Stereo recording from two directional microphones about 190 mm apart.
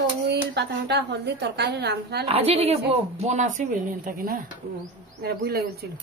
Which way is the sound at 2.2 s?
30° right (ahead or behind).